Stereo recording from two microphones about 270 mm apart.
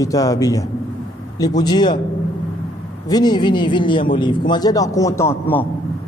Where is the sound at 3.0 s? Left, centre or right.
Centre.